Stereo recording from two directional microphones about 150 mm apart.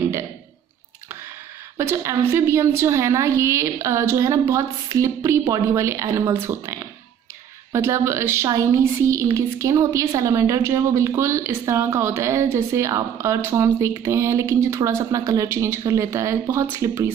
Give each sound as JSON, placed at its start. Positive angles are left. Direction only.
{"t": 1.8, "sound": "a woman's voice", "side_deg": -15}